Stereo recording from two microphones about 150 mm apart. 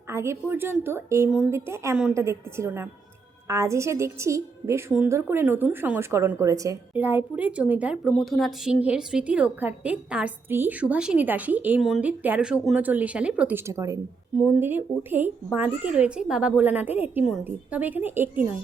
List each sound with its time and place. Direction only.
0.1 s a woman's voice: 15° right (ahead or behind)
6.9 s a woman's voice: 10° right (ahead or behind)
11.8 s speech: centre (ahead or behind)
12.0 s a woman's voice: 10° right (ahead or behind)